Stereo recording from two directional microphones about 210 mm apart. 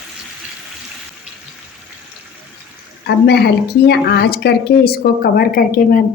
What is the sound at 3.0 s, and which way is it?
Speech, 50° left (ahead or behind).